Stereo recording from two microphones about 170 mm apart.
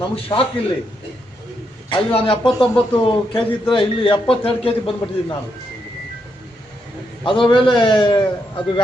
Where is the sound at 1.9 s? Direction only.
30° left (ahead or behind).